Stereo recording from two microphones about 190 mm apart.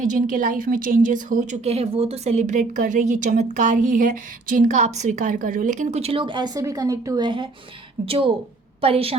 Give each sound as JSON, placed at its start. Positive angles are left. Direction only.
{"t": 0.0, "sound": "a woman's voice", "side_deg": -45}